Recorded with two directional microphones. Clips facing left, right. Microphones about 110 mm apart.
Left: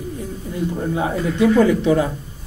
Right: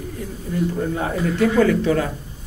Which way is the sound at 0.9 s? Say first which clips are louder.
Left 1 dB; 15° left (ahead or behind).